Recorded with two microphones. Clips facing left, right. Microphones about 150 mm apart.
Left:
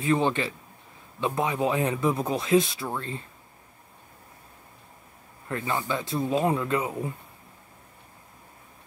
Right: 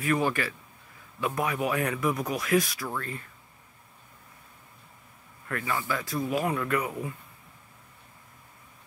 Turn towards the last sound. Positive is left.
turn(degrees=25)  # may be behind; listen again after turning